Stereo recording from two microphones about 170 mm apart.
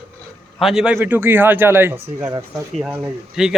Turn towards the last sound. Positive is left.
turn(degrees=-5)  # may be behind; listen again after turning